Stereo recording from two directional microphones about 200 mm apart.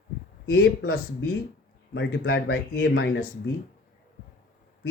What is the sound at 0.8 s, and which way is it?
Speech, 85° left.